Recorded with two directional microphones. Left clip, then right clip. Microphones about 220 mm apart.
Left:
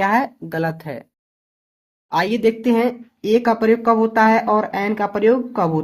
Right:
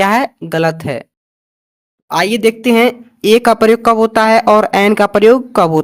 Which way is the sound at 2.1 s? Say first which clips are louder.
Right 5 dB; 30° right (ahead or behind).